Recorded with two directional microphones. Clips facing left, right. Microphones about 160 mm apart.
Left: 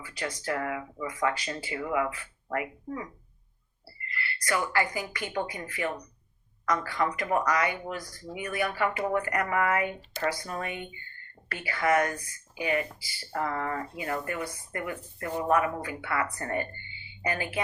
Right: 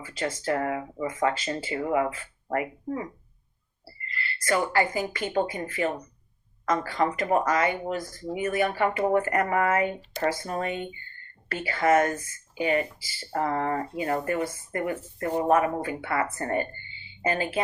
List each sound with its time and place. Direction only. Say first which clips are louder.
0.3 s a woman's voice: right 4 dB; 30° right (ahead or behind)
8.2 s a woman's voice: right 5 dB; 35° right (ahead or behind)